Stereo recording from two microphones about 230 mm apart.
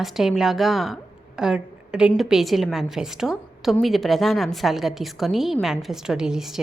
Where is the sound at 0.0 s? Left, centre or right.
Centre.